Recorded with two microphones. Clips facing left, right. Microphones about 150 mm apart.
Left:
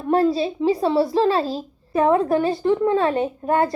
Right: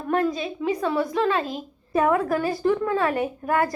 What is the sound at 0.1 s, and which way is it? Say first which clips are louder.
A woman's voice: left 5 dB; 30° left (ahead or behind).